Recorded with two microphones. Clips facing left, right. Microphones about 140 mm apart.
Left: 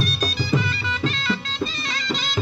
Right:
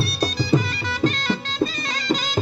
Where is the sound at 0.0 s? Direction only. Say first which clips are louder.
Right 2 dB; 35° right (ahead or behind).